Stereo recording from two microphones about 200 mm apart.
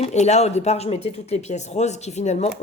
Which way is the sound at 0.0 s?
35° left (ahead or behind).